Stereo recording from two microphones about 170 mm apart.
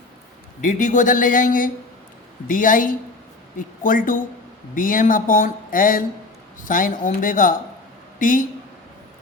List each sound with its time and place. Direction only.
0.6 s speech: 45° left (ahead or behind)